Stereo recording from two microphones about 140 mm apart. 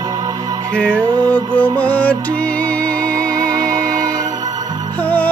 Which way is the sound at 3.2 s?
25° right (ahead or behind).